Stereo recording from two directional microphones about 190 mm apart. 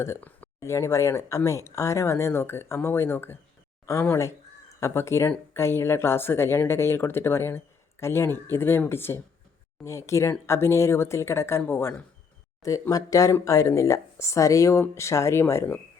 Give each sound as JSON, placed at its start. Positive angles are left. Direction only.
{"t": 0.0, "sound": "speech", "side_deg": 10}